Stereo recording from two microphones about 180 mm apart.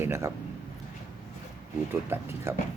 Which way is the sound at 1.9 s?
10° right (ahead or behind).